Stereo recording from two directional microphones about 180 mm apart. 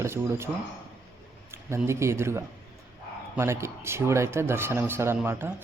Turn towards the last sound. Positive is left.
turn(degrees=-15)  # may be behind; listen again after turning